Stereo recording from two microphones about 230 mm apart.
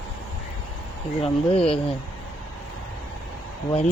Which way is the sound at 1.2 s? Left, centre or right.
Left.